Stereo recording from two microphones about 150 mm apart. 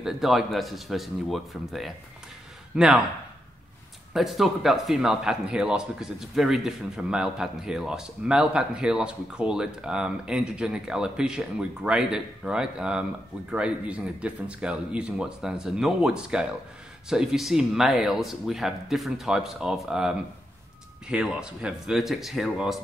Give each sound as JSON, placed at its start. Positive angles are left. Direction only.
{"t": 0.0, "sound": "speech", "side_deg": 0}
{"t": 4.1, "sound": "speech", "side_deg": 0}